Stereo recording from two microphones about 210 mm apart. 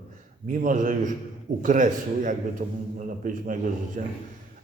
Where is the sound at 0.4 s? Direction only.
40° right (ahead or behind).